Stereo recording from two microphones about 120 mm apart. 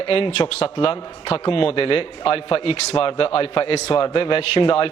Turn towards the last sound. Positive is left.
turn(degrees=50)  # may be behind; listen again after turning